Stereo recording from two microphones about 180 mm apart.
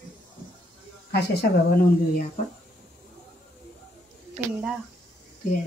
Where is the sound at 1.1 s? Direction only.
60° left (ahead or behind).